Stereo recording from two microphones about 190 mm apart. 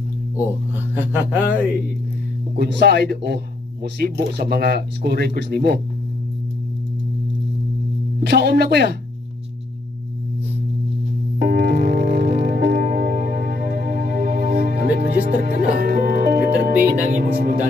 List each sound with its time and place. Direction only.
0.9 s speech: 10° right (ahead or behind)
2.5 s speech: 55° right (ahead or behind)
8.2 s speech: 55° right (ahead or behind)
11.3 s music: 50° right (ahead or behind)
17.1 s speech: 55° right (ahead or behind)